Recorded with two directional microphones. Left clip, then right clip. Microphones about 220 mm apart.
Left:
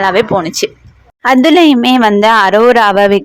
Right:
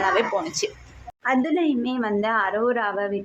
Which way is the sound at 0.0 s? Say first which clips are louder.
Left 11 dB; 40° left (ahead or behind).